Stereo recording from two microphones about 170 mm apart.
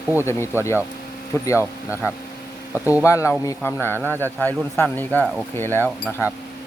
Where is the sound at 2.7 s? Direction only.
10° right (ahead or behind).